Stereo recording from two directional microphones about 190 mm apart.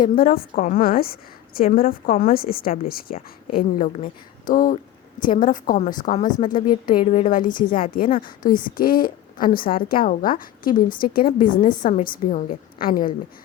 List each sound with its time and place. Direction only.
0.0 s a woman's voice: 50° left (ahead or behind)